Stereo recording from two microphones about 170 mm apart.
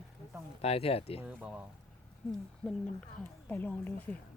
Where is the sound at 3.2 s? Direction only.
10° left (ahead or behind).